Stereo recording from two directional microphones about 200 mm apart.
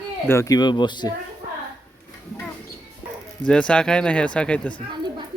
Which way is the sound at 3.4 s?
5° left (ahead or behind).